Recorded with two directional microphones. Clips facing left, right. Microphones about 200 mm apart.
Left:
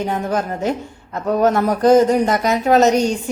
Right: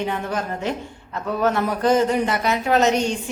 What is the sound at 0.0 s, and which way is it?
A woman's voice, 40° left (ahead or behind).